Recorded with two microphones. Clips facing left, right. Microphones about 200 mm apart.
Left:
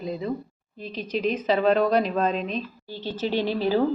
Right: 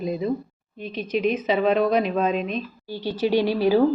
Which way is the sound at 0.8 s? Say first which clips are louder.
Right 3 dB; 35° left (ahead or behind).